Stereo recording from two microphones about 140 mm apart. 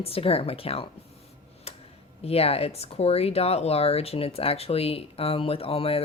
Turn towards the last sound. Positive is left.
turn(degrees=45)  # may be behind; listen again after turning